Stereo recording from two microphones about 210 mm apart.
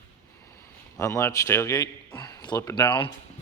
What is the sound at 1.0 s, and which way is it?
A man's voice, 10° left (ahead or behind).